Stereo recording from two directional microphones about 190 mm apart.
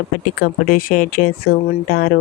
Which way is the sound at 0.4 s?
50° left (ahead or behind).